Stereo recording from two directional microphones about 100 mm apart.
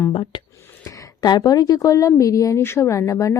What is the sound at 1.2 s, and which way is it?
Speech, 45° left (ahead or behind).